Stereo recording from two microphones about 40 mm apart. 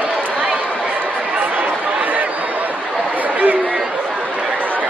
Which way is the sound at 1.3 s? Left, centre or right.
Right.